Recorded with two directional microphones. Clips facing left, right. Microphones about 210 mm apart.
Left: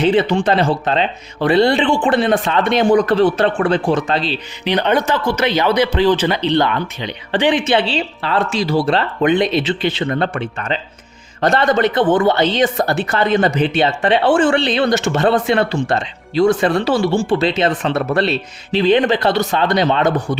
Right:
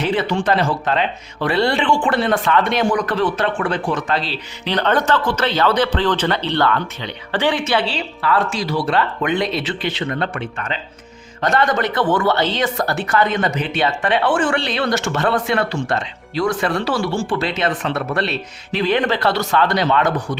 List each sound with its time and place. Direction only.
0.0 s speech: 25° left (ahead or behind)